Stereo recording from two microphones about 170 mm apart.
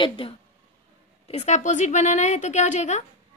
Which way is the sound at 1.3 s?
40° left (ahead or behind).